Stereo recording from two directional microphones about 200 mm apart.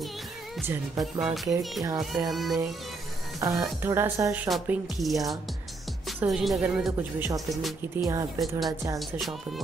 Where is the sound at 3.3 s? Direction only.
15° right (ahead or behind); by 5.2 s centre (ahead or behind).